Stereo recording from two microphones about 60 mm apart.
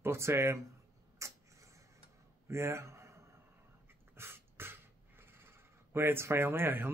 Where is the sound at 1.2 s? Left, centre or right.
Right.